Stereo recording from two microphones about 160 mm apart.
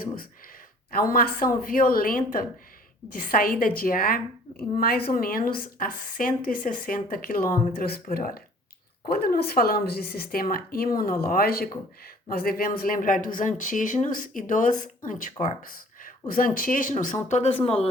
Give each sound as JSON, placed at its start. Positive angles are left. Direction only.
{"t": 0.9, "sound": "a woman's voice", "side_deg": 65}
{"t": 5.1, "sound": "a woman's voice", "side_deg": 65}